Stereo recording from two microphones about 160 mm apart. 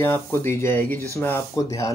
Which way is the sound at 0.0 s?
15° left (ahead or behind).